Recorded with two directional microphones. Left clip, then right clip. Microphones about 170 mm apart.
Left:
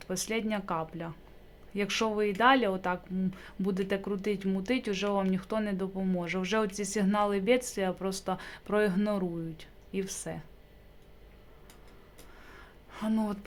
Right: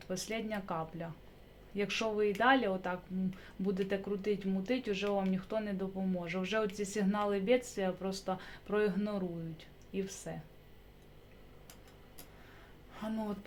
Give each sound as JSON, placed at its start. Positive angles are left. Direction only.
{"t": 0.0, "sound": "speech", "side_deg": 35}
{"t": 12.9, "sound": "a woman's voice", "side_deg": 35}